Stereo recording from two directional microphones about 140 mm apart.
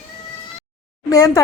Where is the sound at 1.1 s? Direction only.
25° left (ahead or behind).